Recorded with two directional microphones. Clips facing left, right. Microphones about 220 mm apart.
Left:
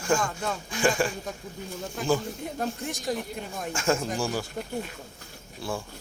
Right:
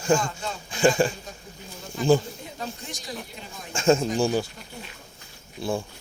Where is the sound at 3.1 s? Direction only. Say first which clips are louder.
Left 7 dB; 45° left (ahead or behind).